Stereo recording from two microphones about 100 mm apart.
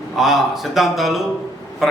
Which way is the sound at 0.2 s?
5° right (ahead or behind).